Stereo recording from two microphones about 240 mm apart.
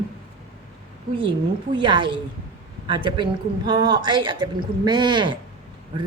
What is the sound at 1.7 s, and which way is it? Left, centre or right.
Speech, centre.